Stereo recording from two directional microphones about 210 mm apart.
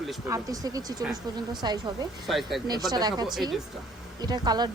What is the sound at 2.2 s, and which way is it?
Speech, centre (ahead or behind).